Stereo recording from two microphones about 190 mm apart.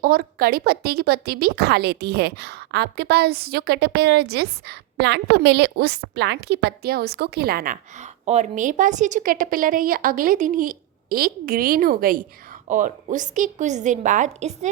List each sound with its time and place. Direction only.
0.0 s a woman's voice: 50° right (ahead or behind)